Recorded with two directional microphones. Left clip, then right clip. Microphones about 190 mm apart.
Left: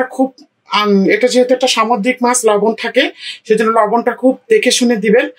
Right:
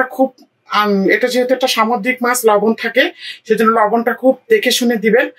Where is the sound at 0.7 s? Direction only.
25° left (ahead or behind).